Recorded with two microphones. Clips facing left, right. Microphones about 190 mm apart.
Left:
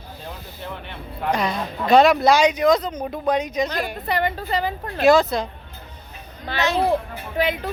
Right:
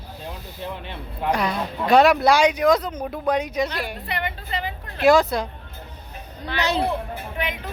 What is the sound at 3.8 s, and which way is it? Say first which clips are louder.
A woman's voice: left 5 dB; 40° left (ahead or behind).